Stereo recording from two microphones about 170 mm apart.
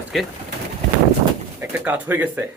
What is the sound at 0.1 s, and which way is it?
Speech, centre (ahead or behind).